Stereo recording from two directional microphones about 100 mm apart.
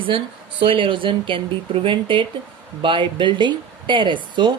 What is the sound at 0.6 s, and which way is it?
Speech, 60° right (ahead or behind).